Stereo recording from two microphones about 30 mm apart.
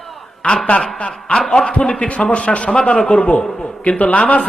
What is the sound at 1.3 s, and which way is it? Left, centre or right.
Snicker, centre.